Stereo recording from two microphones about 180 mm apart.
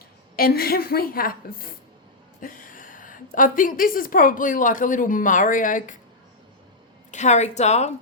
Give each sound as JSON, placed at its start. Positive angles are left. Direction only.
{"t": 0.3, "sound": "a woman's voice", "side_deg": 55}
{"t": 7.1, "sound": "a woman's voice", "side_deg": 40}